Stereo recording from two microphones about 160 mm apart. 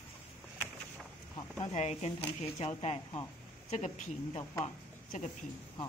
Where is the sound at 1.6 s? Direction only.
45° left (ahead or behind).